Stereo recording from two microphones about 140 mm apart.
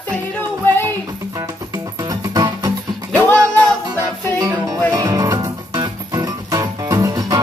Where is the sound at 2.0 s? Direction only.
25° right (ahead or behind).